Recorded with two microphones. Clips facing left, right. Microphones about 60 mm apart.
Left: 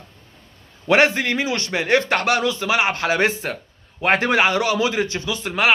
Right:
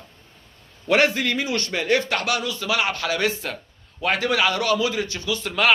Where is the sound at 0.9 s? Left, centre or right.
Left.